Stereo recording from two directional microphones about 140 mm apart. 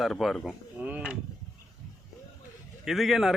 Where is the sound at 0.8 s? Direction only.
10° right (ahead or behind).